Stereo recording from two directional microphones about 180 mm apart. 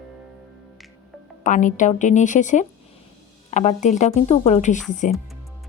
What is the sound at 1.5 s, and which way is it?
A woman's voice, 45° left (ahead or behind).